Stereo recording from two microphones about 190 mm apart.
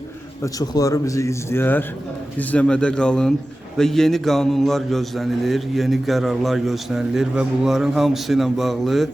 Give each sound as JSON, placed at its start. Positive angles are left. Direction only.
{"t": 0.4, "sound": "a man's voice", "side_deg": 20}